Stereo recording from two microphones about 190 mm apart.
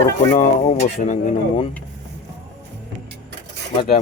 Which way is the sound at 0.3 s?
35° left (ahead or behind).